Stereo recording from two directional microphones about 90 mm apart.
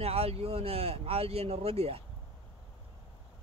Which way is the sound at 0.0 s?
90° right.